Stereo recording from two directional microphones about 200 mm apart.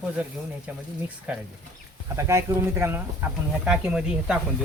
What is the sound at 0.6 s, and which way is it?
Speech, 5° right (ahead or behind).